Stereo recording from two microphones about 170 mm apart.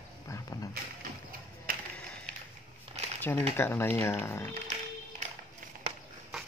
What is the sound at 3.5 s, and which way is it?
Speech, 15° left (ahead or behind).